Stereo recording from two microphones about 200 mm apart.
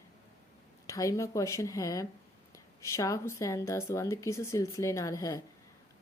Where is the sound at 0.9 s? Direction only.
15° left (ahead or behind).